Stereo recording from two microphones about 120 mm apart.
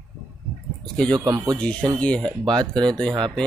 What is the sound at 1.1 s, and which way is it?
Speech, 35° right (ahead or behind).